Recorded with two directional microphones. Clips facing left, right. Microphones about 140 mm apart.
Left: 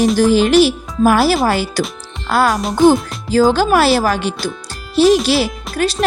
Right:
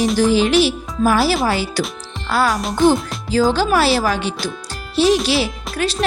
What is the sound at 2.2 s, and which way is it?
Music, 50° left (ahead or behind).